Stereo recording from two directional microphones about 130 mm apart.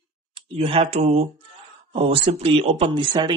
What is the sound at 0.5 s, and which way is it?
Speech, 50° right (ahead or behind).